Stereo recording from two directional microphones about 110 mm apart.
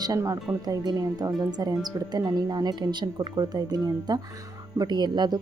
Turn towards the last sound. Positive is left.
turn(degrees=-40)  # may be behind; listen again after turning